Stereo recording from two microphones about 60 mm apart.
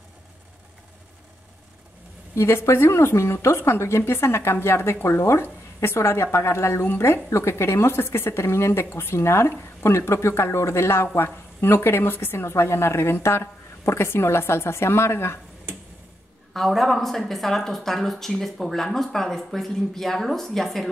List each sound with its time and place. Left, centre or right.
2.3 s a woman's voice: left
16.5 s speech: centre